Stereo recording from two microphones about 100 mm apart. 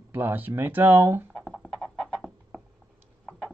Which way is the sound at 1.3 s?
Centre (ahead or behind).